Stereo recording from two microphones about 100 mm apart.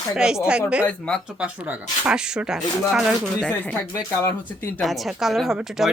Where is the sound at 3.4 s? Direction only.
10° left (ahead or behind).